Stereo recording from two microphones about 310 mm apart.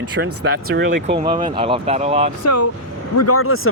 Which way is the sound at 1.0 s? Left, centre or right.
Centre.